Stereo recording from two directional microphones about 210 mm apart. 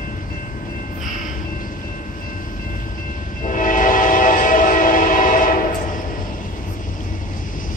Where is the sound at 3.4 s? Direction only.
40° left (ahead or behind).